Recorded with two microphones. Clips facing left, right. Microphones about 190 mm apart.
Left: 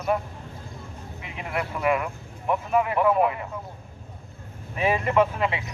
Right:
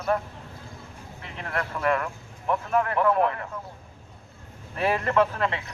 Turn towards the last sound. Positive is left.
turn(degrees=10)  # may be behind; listen again after turning